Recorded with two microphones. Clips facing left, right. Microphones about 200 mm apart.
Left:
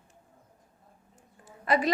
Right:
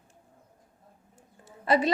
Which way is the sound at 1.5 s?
30° right (ahead or behind).